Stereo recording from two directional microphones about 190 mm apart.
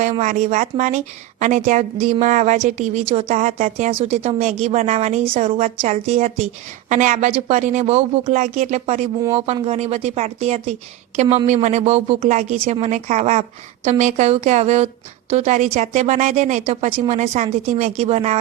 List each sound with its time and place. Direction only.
0.0 s speech: 40° right (ahead or behind)